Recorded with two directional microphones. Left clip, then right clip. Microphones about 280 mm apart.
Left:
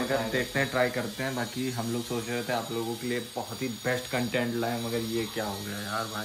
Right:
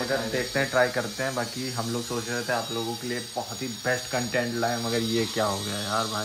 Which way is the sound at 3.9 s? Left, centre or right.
Centre.